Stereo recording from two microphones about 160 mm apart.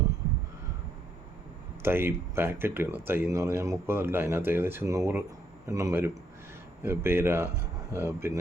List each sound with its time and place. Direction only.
1.8 s speech: 15° right (ahead or behind)